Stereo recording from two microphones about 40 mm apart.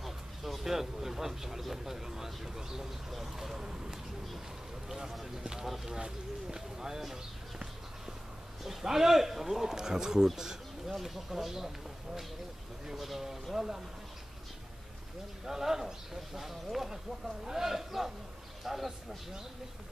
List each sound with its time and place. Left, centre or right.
0.0 s speech: centre
8.6 s speech: centre
12.9 s speech: centre
15.4 s speech: centre